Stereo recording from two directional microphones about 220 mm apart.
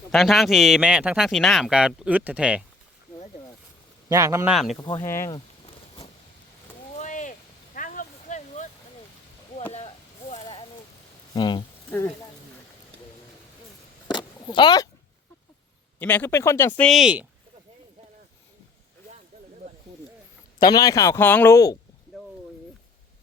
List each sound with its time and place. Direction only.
0.1 s speech: centre (ahead or behind)
4.1 s speech: 15° right (ahead or behind)
4.5 s speech: centre (ahead or behind)
4.9 s speech: 10° left (ahead or behind)
6.9 s a sound: 35° left (ahead or behind)
9.7 s a sound: 30° left (ahead or behind)
11.3 s speech: 20° left (ahead or behind)
11.9 s speech: 5° left (ahead or behind)
14.1 s a sound: 20° left (ahead or behind)
16.0 s speech: 5° left (ahead or behind)
20.6 s speech: 20° left (ahead or behind)